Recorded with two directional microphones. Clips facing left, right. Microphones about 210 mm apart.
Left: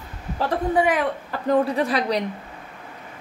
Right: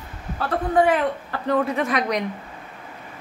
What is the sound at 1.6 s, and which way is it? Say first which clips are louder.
Speech: left 1 dB; 30° left (ahead or behind).